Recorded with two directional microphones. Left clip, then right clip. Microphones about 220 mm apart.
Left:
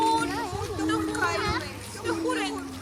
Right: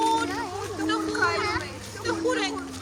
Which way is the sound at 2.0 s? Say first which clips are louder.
Right 2 dB; 40° right (ahead or behind).